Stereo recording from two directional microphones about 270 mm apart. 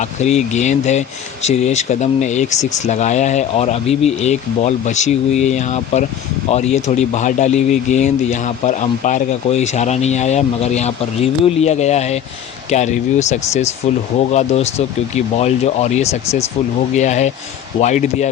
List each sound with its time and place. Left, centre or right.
0.0 s speech: left